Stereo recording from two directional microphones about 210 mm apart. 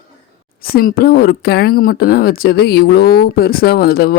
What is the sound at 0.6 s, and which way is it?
Speech, 45° left (ahead or behind).